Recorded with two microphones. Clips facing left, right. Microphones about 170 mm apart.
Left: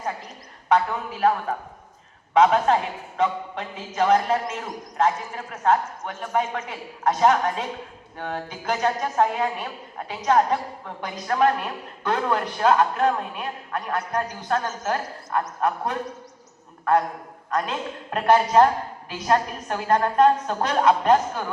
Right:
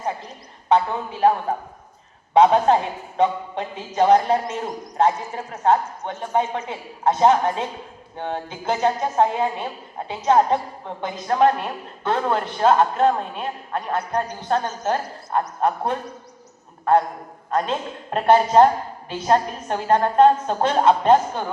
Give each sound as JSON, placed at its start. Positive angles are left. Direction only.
{"t": 0.7, "sound": "a woman's voice", "side_deg": -30}
{"t": 17.5, "sound": "a woman's voice", "side_deg": -30}